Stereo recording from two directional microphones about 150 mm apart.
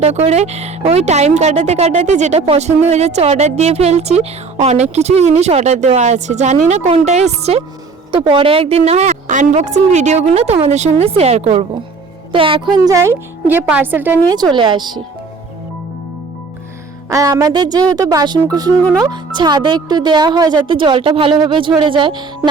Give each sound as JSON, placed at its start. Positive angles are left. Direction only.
{"t": 0.0, "sound": "a woman's voice", "side_deg": -45}
{"t": 8.1, "sound": "speech", "side_deg": -35}
{"t": 9.2, "sound": "a woman's voice", "side_deg": -55}
{"t": 12.3, "sound": "speech", "side_deg": -35}
{"t": 12.8, "sound": "a woman's voice", "side_deg": -20}
{"t": 14.5, "sound": "speech", "side_deg": -30}
{"t": 17.1, "sound": "speech", "side_deg": -20}
{"t": 18.8, "sound": "speech", "side_deg": 10}
{"t": 19.0, "sound": "speech", "side_deg": -30}